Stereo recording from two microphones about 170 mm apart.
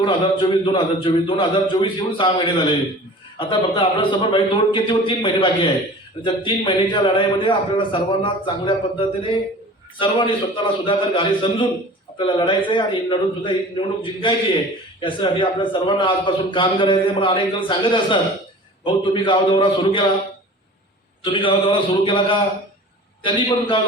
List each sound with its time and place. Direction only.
0.0 s a man's voice: 30° left (ahead or behind)
21.2 s a man's voice: 30° left (ahead or behind)